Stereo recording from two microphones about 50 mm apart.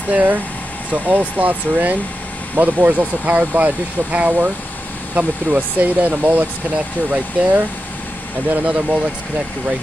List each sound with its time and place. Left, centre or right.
0.1 s speech: right